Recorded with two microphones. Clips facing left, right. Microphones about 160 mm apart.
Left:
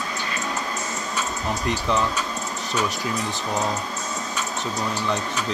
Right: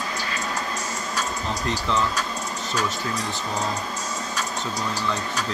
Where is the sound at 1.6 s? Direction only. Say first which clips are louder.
Left 2 dB; 15° left (ahead or behind).